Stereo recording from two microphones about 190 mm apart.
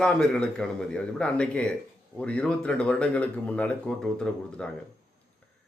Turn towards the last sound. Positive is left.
turn(degrees=5)  # may be behind; listen again after turning